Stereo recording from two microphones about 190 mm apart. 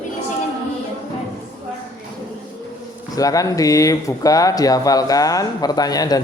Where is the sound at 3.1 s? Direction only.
20° left (ahead or behind).